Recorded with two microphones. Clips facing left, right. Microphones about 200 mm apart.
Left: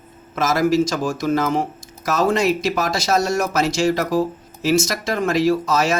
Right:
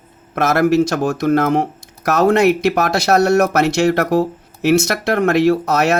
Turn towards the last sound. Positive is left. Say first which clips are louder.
# right 3 dB
turn(degrees=-65)  # may be behind; listen again after turning